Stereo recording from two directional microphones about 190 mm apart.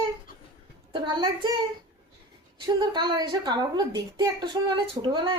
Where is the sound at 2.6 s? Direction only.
25° right (ahead or behind).